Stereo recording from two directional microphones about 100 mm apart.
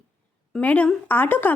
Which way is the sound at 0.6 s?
15° left (ahead or behind).